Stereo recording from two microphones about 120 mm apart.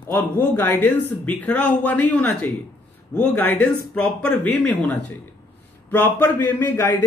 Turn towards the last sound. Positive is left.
turn(degrees=20)  # may be behind; listen again after turning